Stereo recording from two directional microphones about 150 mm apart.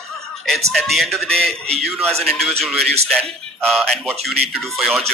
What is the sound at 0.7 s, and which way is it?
Speech, centre (ahead or behind).